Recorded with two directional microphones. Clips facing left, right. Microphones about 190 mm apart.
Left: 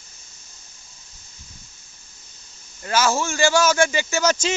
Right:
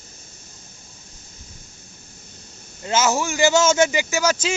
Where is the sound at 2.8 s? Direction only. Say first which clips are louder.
Right 1 dB; 20° right (ahead or behind).